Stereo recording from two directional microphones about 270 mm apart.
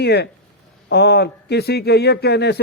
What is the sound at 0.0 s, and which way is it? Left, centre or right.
A man's voice, left.